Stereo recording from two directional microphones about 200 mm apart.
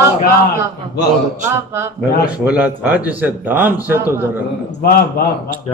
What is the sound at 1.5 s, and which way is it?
Speech, 15° right (ahead or behind).